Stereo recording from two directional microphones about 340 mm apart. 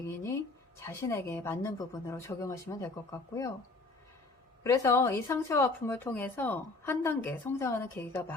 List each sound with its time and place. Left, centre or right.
0.8 s speech: centre
4.6 s speech: centre